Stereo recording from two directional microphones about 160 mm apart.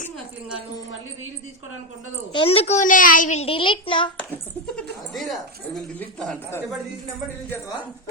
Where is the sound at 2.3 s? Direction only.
35° left (ahead or behind).